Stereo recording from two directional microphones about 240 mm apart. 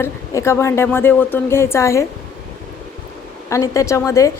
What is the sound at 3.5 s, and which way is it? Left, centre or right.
Speech, centre.